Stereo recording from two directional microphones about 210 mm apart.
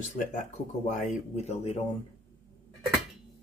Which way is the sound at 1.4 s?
30° left (ahead or behind).